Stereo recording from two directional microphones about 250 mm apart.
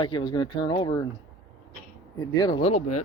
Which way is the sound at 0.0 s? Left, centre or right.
Centre.